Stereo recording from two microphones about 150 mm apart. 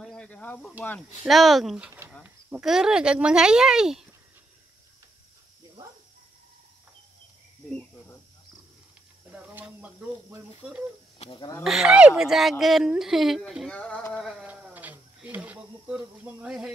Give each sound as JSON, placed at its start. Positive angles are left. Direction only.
{"t": 0.0, "sound": "cricket", "side_deg": 5}
{"t": 1.2, "sound": "speech", "side_deg": 0}
{"t": 1.9, "sound": "speech", "side_deg": -15}
{"t": 9.3, "sound": "speech", "side_deg": -10}
{"t": 11.1, "sound": "speech", "side_deg": 30}
{"t": 11.6, "sound": "speech", "side_deg": -5}